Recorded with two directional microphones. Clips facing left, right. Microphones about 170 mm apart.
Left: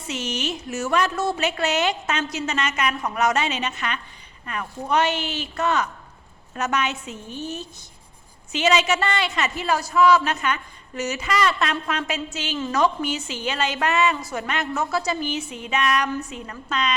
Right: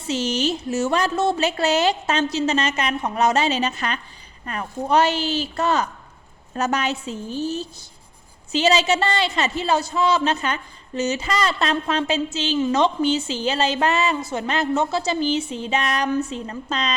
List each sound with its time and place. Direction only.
0.1 s a woman's voice: 30° right (ahead or behind)
1.4 s a woman's voice: 30° right (ahead or behind)
12.5 s a woman's voice: 20° right (ahead or behind)